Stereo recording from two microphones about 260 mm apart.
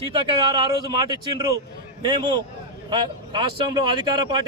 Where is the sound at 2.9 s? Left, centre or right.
Centre.